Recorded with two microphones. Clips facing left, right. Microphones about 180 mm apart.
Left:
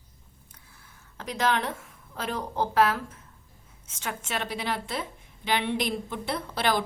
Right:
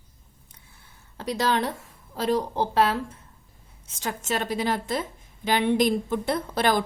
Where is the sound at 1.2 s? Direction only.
35° right (ahead or behind).